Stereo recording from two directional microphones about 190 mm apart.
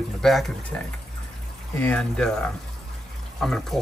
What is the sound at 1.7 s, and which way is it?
Speech, 5° left (ahead or behind).